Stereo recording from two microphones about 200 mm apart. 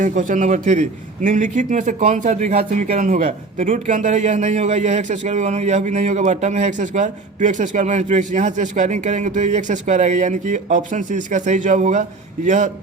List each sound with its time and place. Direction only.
0.0 s a man's voice: 40° right (ahead or behind)